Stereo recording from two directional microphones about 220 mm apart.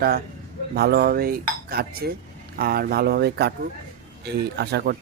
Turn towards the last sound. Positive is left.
turn(degrees=-50)  # may be behind; listen again after turning